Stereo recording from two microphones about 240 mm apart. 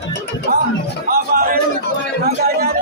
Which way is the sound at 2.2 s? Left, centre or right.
Right.